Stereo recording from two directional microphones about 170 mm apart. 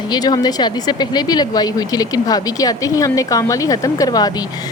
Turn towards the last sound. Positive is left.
turn(degrees=25)  # may be behind; listen again after turning